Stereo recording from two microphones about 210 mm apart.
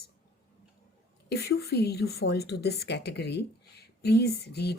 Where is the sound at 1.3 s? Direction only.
50° left (ahead or behind).